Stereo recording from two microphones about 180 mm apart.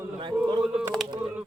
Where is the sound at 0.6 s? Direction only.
5° right (ahead or behind).